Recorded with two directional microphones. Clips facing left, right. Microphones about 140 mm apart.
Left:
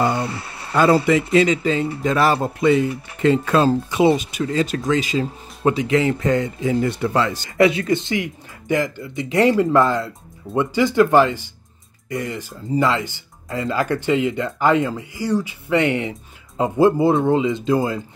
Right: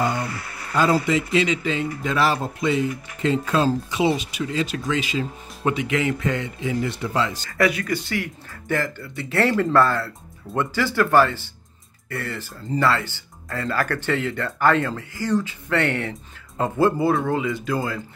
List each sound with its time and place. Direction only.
0.1 s a sound: 30° left (ahead or behind)
0.7 s a man's voice: 65° left (ahead or behind)
1.3 s a man's voice: 45° left (ahead or behind)
2.3 s a man's voice: 60° left (ahead or behind)
7.5 s speech: 25° left (ahead or behind)